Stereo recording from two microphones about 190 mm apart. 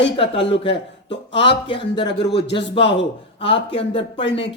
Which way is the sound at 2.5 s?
30° left (ahead or behind).